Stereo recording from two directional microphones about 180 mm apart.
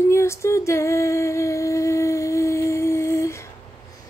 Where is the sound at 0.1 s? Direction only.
15° left (ahead or behind).